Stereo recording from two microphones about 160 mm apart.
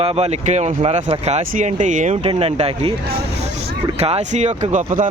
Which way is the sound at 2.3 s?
40° right (ahead or behind).